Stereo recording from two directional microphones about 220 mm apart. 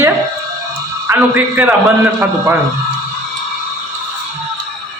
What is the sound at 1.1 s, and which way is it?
Speech, 10° right (ahead or behind).